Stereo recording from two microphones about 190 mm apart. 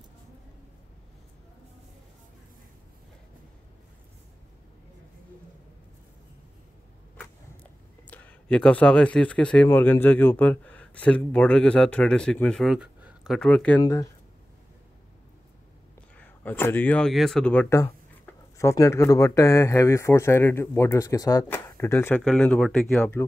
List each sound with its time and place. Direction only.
8.1 s speech: 5° left (ahead or behind)
13.7 s speech: 15° left (ahead or behind)
16.2 s speech: 10° left (ahead or behind)